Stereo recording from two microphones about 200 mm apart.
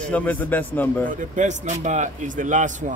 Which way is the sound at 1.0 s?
40° right (ahead or behind).